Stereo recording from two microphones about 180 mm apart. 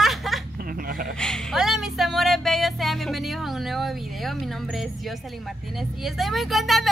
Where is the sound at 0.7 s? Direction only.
50° right (ahead or behind).